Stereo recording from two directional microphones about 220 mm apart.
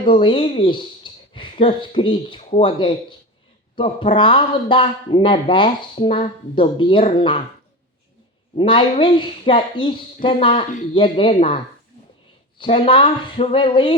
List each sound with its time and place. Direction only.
0.0 s speech: 25° left (ahead or behind)
8.5 s speech: 20° left (ahead or behind)